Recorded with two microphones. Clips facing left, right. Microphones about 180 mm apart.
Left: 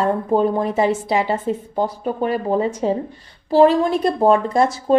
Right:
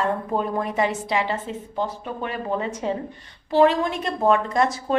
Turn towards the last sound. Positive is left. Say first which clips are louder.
# left 5 dB
turn(degrees=30)  # may be behind; listen again after turning